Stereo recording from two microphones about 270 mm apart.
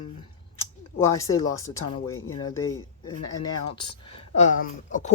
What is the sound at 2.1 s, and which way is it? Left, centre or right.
Speech, left.